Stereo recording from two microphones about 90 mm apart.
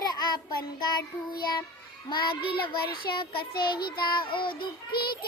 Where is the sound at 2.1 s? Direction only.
65° left (ahead or behind).